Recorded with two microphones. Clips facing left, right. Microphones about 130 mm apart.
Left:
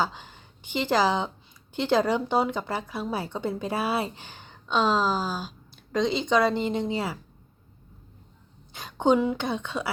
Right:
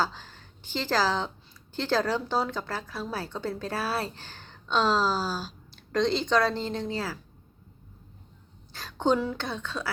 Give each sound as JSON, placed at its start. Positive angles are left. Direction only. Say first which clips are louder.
{"t": 0.0, "sound": "speech", "louder": "left 1 dB", "side_deg": 15}
{"t": 8.7, "sound": "speech", "louder": "left 3 dB", "side_deg": 15}